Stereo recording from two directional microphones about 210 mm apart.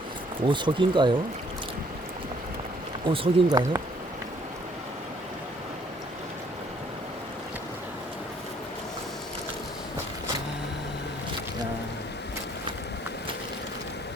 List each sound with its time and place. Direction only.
0.4 s speech: 25° right (ahead or behind)
3.1 s speech: 15° right (ahead or behind)